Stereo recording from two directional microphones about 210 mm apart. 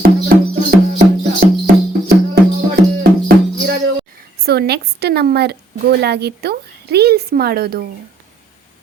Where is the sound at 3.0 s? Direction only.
45° right (ahead or behind).